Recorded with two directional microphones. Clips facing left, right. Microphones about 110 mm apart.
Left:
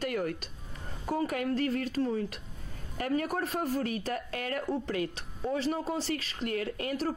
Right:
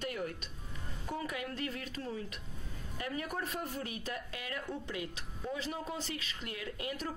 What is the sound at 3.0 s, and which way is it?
Speech, 50° left (ahead or behind).